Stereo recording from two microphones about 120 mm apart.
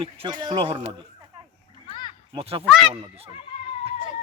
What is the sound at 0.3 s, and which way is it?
A man's voice, 40° right (ahead or behind).